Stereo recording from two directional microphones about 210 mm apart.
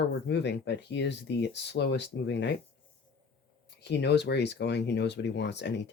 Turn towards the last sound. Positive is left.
turn(degrees=55)  # may be behind; listen again after turning